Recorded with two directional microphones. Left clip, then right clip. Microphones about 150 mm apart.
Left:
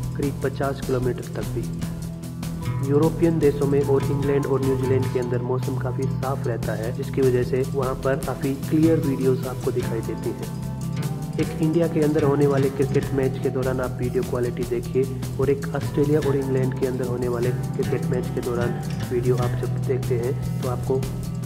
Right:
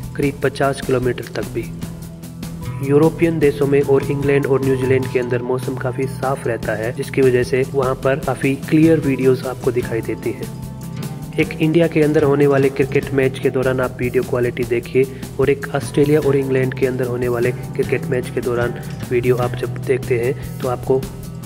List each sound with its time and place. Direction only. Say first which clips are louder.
0.4 s speech: right 9 dB; 35° right (ahead or behind)
2.9 s speech: right 6 dB; 35° right (ahead or behind)
7.8 s speech: right 6 dB; 40° right (ahead or behind)
11.3 s speech: right 7 dB; 30° right (ahead or behind)
13.1 s speech: right 7 dB; 35° right (ahead or behind)